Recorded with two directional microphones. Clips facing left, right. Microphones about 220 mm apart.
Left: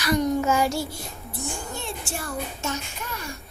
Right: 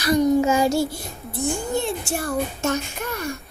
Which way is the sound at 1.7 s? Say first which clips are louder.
Right 9 dB; 55° right (ahead or behind).